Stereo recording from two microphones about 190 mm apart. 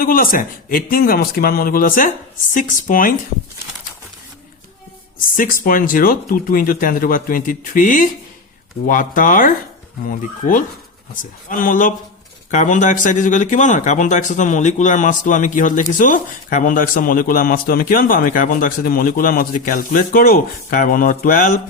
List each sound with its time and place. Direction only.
0.0 s speech: 50° left (ahead or behind)
5.4 s speech: 50° left (ahead or behind)